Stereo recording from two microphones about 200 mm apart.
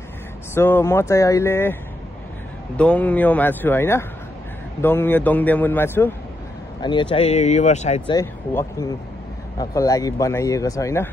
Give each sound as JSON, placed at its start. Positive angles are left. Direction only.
{"t": 0.6, "sound": "speech", "side_deg": 10}
{"t": 2.8, "sound": "speech", "side_deg": 5}
{"t": 6.8, "sound": "speech", "side_deg": 25}
{"t": 8.1, "sound": "speech", "side_deg": 15}